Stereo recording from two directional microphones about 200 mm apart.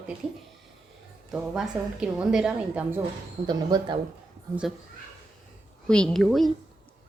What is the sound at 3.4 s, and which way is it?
Speech, 20° right (ahead or behind).